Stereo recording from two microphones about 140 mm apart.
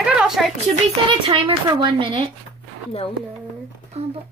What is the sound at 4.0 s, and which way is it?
Speech, 50° right (ahead or behind).